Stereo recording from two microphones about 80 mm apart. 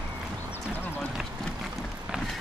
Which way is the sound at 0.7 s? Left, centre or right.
Left.